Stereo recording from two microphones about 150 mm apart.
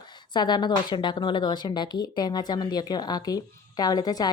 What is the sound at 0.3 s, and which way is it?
A woman's voice, 30° left (ahead or behind).